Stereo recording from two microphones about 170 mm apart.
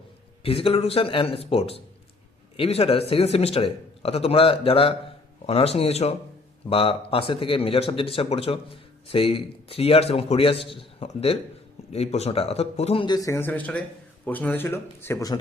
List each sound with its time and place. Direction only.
0.4 s speech: 35° left (ahead or behind); by 15.4 s 20° left (ahead or behind)